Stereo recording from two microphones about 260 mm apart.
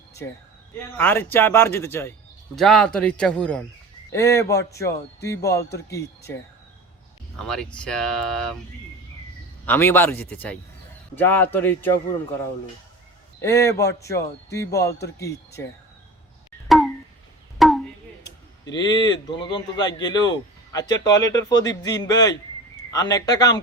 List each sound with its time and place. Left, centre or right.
0.2 s speech: centre
7.3 s speech: centre
9.6 s speech: centre
13.4 s speech: centre
16.6 s a sound: centre
17.6 s chop: centre
18.6 s speech: centre